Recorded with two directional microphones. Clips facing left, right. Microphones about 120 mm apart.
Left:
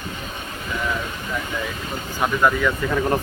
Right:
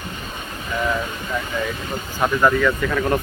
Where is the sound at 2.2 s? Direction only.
Centre (ahead or behind).